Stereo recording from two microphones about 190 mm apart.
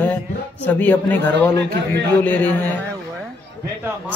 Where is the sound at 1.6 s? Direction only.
65° right (ahead or behind).